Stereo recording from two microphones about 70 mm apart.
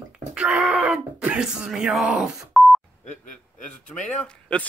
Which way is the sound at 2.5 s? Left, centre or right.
Centre.